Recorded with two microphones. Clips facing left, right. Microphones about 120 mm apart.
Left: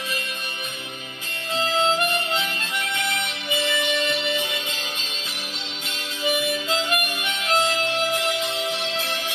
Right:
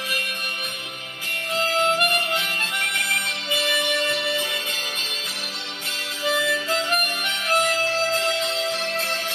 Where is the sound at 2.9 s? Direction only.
20° left (ahead or behind).